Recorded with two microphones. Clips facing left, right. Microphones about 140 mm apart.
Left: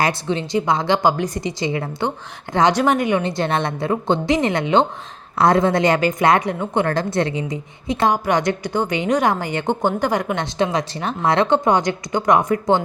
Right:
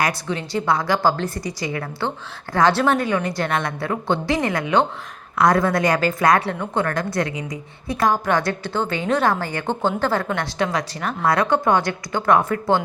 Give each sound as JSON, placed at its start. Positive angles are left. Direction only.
{"t": 0.0, "sound": "a woman's voice", "side_deg": 25}